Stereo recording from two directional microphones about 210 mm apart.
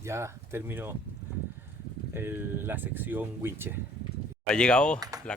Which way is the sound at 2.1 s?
10° right (ahead or behind).